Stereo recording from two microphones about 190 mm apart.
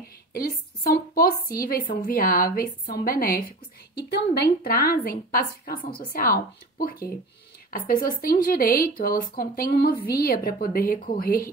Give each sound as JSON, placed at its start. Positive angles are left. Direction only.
{"t": 0.0, "sound": "a woman's voice", "side_deg": 50}